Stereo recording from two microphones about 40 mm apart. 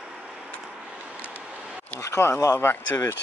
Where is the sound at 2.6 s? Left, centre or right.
Left.